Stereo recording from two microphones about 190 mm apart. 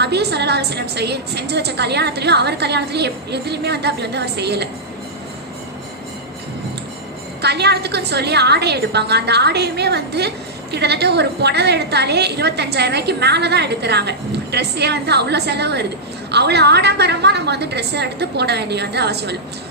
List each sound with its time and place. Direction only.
0.0 s a woman's voice: 60° right (ahead or behind)
7.4 s a woman's voice: 60° right (ahead or behind)